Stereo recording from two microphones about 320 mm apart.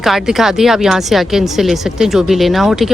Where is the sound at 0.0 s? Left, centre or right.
Centre.